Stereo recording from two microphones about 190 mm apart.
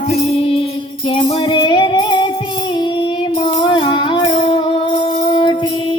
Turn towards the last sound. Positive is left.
turn(degrees=25)  # may be behind; listen again after turning